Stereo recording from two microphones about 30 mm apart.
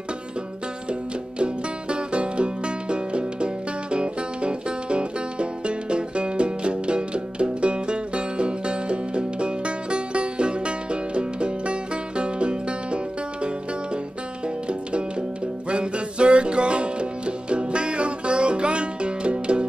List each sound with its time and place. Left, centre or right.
1.4 s music: right
14.7 s music: right